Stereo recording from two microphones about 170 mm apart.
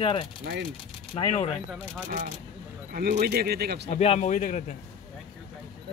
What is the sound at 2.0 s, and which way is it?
Speech, 55° right (ahead or behind).